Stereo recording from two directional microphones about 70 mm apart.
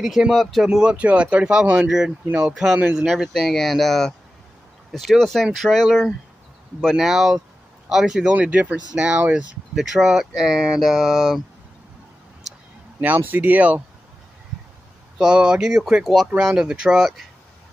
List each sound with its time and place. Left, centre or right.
0.0 s speech: centre
0.7 s speech: centre
8.4 s speech: right
9.8 s speech: centre
13.0 s speech: right
15.1 s speech: centre